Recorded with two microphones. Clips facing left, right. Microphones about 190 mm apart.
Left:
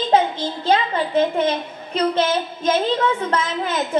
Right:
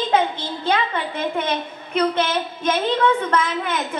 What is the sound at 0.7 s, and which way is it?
A woman's voice, 30° left (ahead or behind).